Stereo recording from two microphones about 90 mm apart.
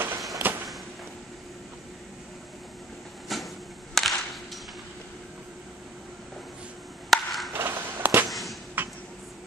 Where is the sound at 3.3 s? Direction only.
Centre (ahead or behind).